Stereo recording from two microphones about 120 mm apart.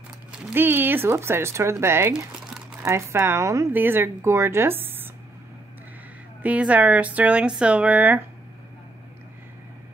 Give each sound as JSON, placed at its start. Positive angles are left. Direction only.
{"t": 0.3, "sound": "speech", "side_deg": -15}
{"t": 6.4, "sound": "speech", "side_deg": -10}